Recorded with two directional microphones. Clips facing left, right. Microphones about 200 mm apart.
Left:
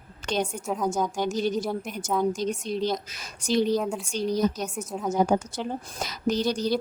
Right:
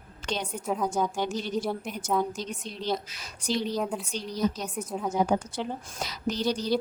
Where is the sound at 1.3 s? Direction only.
45° left (ahead or behind).